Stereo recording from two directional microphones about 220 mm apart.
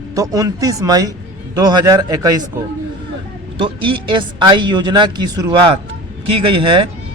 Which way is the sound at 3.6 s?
20° right (ahead or behind).